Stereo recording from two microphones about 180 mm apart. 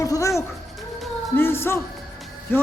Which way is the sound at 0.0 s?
20° left (ahead or behind).